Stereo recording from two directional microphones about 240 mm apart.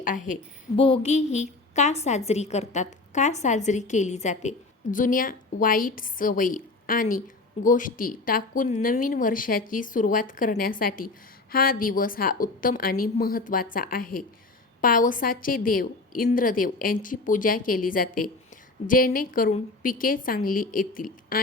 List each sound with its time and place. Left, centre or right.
0.0 s a woman's voice: left